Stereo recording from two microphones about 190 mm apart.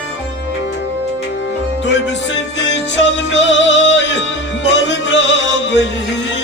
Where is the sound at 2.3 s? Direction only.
70° left (ahead or behind).